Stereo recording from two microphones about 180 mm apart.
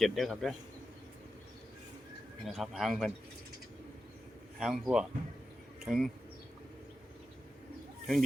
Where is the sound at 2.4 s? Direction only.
Centre (ahead or behind).